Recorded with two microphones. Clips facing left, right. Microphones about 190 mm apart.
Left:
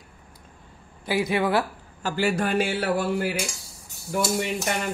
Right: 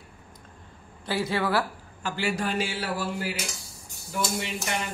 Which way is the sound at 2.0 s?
45° left (ahead or behind).